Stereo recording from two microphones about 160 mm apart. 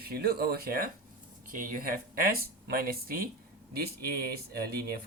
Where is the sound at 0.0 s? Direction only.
75° right (ahead or behind).